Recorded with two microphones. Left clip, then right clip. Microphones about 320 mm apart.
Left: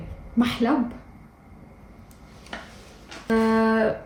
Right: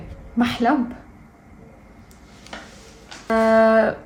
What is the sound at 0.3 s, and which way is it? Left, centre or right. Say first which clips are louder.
Speech: right 3 dB; right.